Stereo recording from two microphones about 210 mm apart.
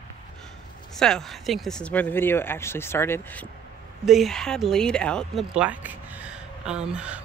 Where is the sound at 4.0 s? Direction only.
Centre (ahead or behind).